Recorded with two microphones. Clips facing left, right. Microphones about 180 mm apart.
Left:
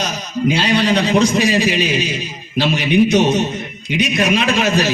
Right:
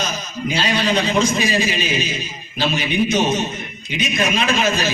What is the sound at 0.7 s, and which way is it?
A man's voice, 70° left (ahead or behind).